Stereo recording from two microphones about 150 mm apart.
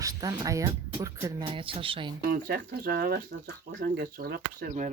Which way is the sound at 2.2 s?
75° right (ahead or behind).